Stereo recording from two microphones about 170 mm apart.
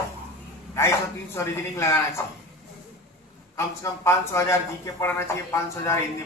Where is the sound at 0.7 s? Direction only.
15° left (ahead or behind).